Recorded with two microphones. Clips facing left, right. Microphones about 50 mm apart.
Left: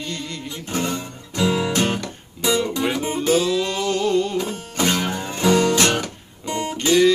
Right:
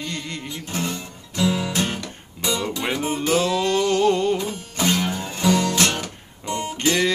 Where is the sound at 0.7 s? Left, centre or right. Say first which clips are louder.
Left 4 dB; centre.